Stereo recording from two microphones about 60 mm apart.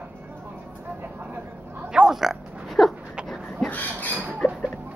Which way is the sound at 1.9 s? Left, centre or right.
Centre.